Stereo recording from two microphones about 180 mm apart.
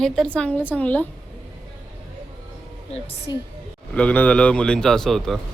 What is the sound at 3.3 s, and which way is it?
Speech, 25° left (ahead or behind).